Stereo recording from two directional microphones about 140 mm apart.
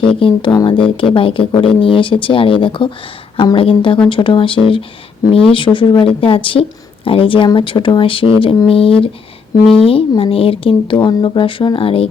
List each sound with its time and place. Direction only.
0.0 s speech: 40° left (ahead or behind)